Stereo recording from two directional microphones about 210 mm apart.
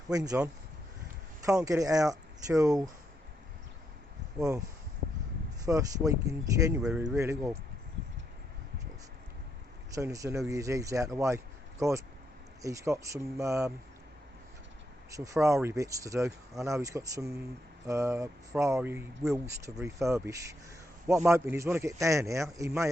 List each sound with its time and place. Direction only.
0.1 s speech: 15° right (ahead or behind)
5.6 s speech: 15° right (ahead or behind)
9.9 s speech: 15° right (ahead or behind)
15.1 s speech: 15° right (ahead or behind)